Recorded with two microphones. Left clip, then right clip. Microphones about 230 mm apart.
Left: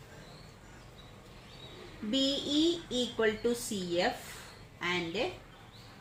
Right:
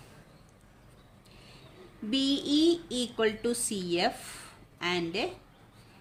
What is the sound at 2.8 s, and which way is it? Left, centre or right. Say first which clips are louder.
Speech: right 1 dB; right.